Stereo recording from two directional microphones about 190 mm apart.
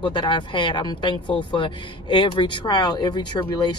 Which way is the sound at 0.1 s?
25° left (ahead or behind).